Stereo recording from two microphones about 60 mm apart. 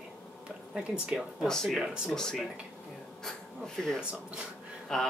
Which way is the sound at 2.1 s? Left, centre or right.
Centre.